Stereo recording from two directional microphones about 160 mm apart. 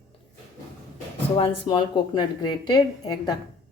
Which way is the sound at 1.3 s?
35° left (ahead or behind).